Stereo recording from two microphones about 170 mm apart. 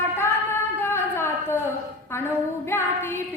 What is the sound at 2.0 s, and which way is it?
Female singing, 15° left (ahead or behind).